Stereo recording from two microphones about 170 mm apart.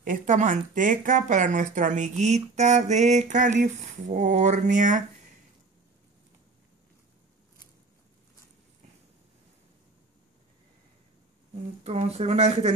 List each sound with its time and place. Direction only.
0.0 s speech: 50° right (ahead or behind)
11.8 s speech: 35° right (ahead or behind)